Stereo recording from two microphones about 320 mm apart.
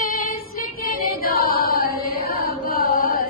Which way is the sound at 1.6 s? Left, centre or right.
Left.